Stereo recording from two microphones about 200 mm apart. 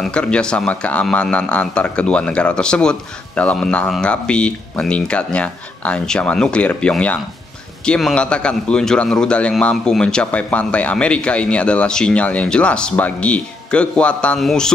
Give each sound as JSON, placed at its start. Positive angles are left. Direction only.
{"t": 0.0, "sound": "speech", "side_deg": 5}